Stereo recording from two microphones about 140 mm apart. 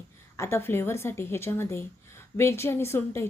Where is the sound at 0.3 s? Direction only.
20° left (ahead or behind).